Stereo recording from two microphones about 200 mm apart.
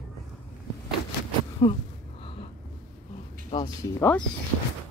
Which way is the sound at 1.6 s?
25° left (ahead or behind).